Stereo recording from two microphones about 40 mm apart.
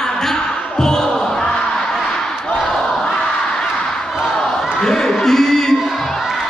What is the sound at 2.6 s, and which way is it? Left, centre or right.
Battle cry, centre.